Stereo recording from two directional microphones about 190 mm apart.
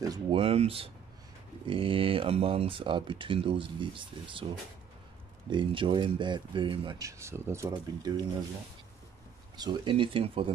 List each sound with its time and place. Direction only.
0.0 s speech: 20° right (ahead or behind)
0.4 s speech: 30° right (ahead or behind)
5.5 s speech: 25° right (ahead or behind)
7.0 s speech: 15° right (ahead or behind)
9.6 s speech: 25° right (ahead or behind)